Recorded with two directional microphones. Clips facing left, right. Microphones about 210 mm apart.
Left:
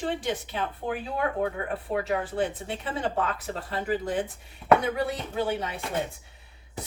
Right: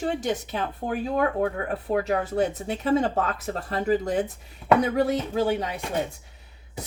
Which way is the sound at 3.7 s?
40° right (ahead or behind).